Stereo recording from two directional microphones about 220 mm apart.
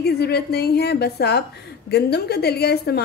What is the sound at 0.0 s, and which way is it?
A woman's voice, 45° left (ahead or behind).